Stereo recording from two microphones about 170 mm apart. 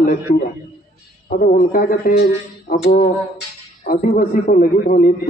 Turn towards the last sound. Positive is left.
turn(degrees=55)  # may be behind; listen again after turning